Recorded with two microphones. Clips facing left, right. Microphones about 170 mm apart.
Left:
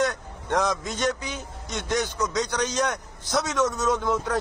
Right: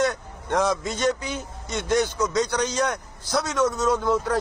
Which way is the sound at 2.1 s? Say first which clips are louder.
Right 3 dB; centre (ahead or behind).